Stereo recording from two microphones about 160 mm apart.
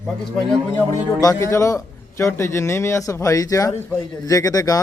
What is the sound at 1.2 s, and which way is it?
A man's voice, 20° left (ahead or behind).